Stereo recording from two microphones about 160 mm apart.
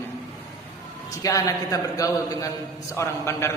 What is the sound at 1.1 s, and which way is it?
A man's voice, 20° left (ahead or behind).